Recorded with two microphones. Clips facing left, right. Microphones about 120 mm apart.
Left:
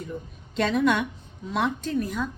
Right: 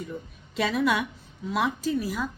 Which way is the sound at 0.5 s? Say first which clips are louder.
Left 2 dB; 5° right (ahead or behind).